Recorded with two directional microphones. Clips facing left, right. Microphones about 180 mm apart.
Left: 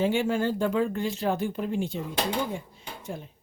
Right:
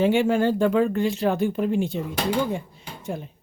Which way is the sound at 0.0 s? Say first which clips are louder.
Right 5 dB; 70° right (ahead or behind).